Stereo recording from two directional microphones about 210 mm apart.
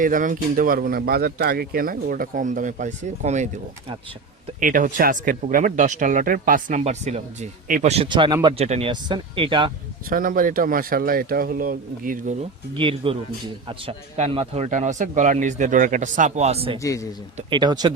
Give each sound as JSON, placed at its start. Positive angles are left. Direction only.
{"t": 0.0, "sound": "speech", "side_deg": -40}
{"t": 10.1, "sound": "speech", "side_deg": -40}
{"t": 12.7, "sound": "speech", "side_deg": -25}
{"t": 16.8, "sound": "speech", "side_deg": 15}
{"t": 17.3, "sound": "speech", "side_deg": -20}